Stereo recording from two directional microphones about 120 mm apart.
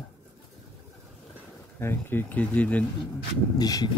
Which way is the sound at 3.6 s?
35° left (ahead or behind).